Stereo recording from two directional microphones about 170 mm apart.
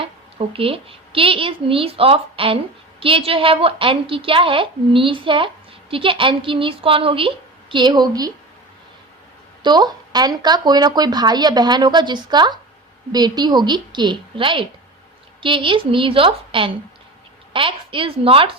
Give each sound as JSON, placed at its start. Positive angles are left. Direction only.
{"t": 0.0, "sound": "a woman's voice", "side_deg": -35}
{"t": 9.6, "sound": "a woman's voice", "side_deg": -25}